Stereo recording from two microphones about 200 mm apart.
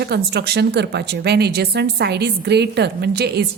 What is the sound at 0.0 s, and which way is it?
Speech, 55° right (ahead or behind).